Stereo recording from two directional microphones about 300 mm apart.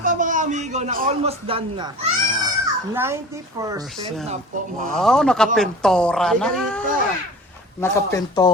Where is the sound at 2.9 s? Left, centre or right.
Centre.